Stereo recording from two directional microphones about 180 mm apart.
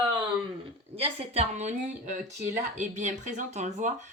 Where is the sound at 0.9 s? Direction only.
35° right (ahead or behind).